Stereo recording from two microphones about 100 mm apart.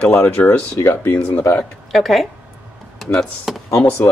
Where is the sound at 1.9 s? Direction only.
Centre (ahead or behind).